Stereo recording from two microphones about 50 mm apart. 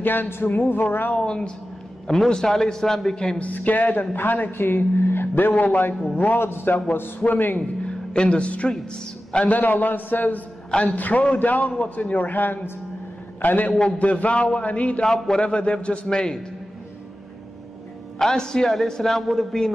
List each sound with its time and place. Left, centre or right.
0.0 s speech: left
1.1 s a man's voice: centre
3.3 s speech: left
7.8 s music: left
9.3 s a man's voice: left
9.6 s speech: left
10.7 s a man's voice: centre
11.0 s a man's voice: left
15.0 s a man's voice: centre
15.3 s a man's voice: left
18.2 s a man's voice: centre